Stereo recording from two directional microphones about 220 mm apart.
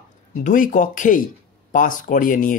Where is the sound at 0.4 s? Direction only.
35° left (ahead or behind).